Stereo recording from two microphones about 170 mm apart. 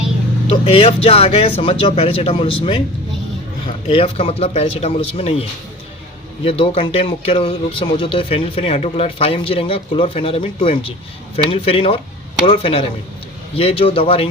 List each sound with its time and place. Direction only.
0.5 s speech: 35° left (ahead or behind)
3.8 s speech: 35° left (ahead or behind)